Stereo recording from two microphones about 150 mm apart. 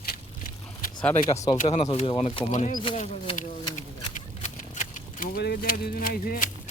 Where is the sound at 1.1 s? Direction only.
40° left (ahead or behind).